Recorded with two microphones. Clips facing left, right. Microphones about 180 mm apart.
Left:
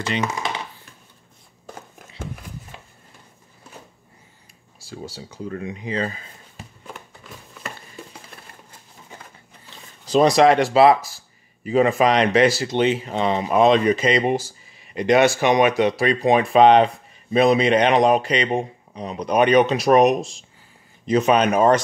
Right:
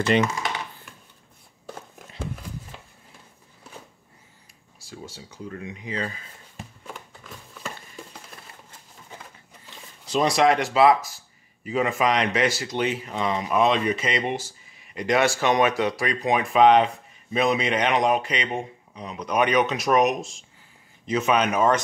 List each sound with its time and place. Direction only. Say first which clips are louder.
4.7 s speech: left 5 dB; 35° left (ahead or behind)
7.5 s a sound: left 1 dB; 5° left (ahead or behind)
10.3 s speech: left 5 dB; 35° left (ahead or behind)
15.0 s speech: left 5 dB; 20° left (ahead or behind)